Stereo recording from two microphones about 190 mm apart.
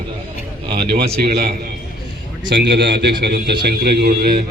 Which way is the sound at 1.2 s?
55° right (ahead or behind).